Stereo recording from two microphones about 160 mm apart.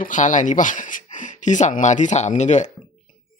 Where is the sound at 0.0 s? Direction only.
50° left (ahead or behind).